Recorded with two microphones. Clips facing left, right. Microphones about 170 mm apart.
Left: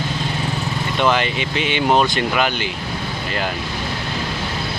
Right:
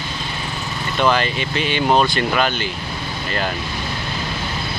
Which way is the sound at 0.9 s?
15° left (ahead or behind).